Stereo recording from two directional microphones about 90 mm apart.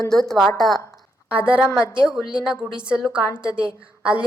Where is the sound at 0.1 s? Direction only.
5° left (ahead or behind).